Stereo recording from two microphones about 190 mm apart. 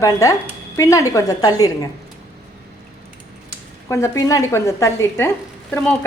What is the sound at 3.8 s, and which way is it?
Speech, 15° left (ahead or behind).